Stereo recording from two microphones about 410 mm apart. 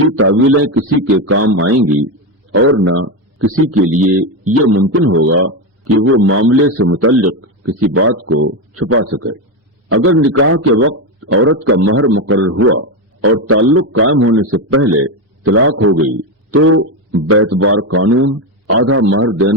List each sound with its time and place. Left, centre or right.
0.2 s a man's voice: right